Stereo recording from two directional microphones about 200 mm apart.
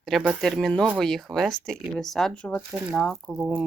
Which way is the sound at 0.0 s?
Centre (ahead or behind).